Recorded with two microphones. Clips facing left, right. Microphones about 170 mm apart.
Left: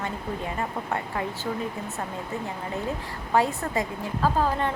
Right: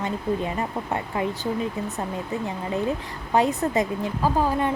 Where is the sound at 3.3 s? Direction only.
20° right (ahead or behind).